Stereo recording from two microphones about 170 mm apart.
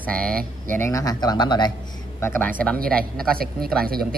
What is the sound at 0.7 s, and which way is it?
Speech, 15° left (ahead or behind).